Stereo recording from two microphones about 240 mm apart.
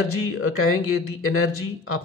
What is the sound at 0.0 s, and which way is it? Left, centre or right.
Speech, left.